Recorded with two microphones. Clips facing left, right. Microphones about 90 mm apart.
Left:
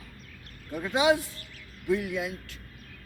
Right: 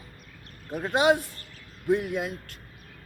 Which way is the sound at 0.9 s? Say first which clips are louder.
Right 2 dB; 50° right (ahead or behind).